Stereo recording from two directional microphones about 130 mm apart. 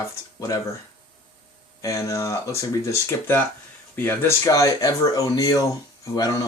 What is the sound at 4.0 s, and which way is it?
Speech, 15° left (ahead or behind).